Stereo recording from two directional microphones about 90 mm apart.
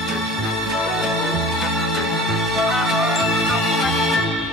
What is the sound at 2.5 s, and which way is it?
Music, centre (ahead or behind).